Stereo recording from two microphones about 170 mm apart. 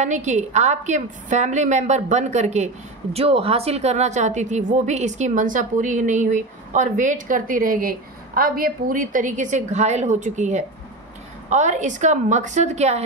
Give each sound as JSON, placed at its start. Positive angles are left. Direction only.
{"t": 0.0, "sound": "a woman's voice", "side_deg": -45}